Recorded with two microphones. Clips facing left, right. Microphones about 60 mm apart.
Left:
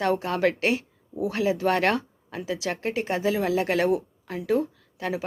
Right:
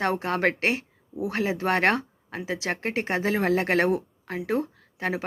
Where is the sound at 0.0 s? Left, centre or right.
Right.